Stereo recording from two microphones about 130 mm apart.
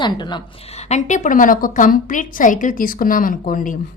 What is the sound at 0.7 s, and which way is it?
A woman's voice, 60° left (ahead or behind).